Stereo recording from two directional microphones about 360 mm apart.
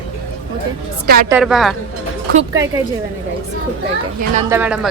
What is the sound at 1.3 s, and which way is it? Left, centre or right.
Speech, centre.